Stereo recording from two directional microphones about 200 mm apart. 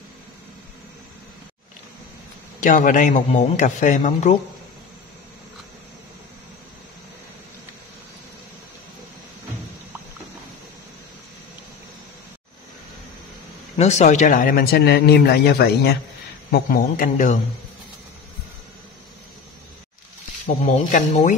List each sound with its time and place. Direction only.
2.6 s a man's voice: 40° left (ahead or behind)
13.7 s speech: 35° left (ahead or behind)
20.4 s a man's voice: 35° left (ahead or behind)